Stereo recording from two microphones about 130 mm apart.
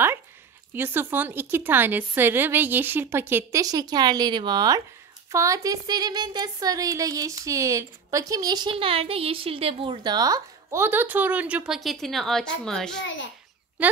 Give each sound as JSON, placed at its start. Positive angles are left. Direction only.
{"t": 0.7, "sound": "a woman's voice", "side_deg": -15}
{"t": 3.6, "sound": "a woman's voice", "side_deg": -30}
{"t": 13.8, "sound": "a child's voice", "side_deg": -10}